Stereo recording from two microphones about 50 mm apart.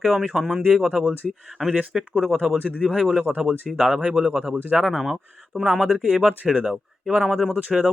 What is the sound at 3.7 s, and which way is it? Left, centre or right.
Speech, centre.